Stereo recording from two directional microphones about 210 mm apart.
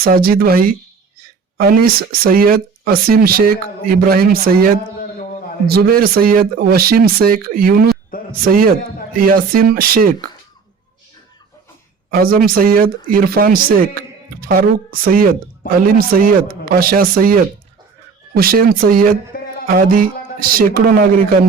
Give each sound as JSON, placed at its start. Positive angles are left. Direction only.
{"t": 0.0, "sound": "speech", "side_deg": -45}
{"t": 12.1, "sound": "speech", "side_deg": -45}